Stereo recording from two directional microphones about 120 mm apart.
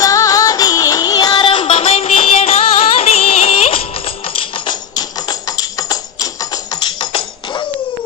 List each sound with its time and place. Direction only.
0.0 s music: 30° left (ahead or behind)
1.6 s music: 60° left (ahead or behind)
4.5 s music: 40° left (ahead or behind)